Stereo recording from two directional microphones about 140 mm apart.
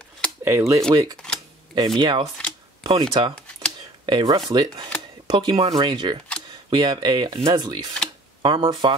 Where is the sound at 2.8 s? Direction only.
30° right (ahead or behind).